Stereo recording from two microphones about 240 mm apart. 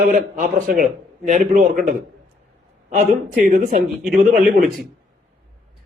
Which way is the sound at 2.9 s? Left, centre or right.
Right.